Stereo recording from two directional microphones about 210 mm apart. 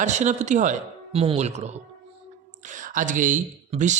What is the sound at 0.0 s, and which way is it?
Speech, 35° right (ahead or behind).